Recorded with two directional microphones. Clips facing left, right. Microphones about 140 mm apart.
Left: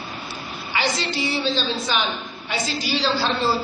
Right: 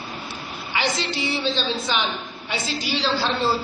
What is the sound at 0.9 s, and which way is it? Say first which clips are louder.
A man's voice: left 1 dB; 20° right (ahead or behind).